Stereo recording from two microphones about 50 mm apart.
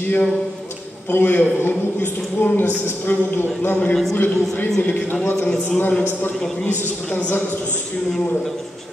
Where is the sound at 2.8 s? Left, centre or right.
Left.